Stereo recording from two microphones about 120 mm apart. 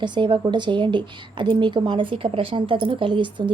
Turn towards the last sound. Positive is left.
turn(degrees=-45)  # may be behind; listen again after turning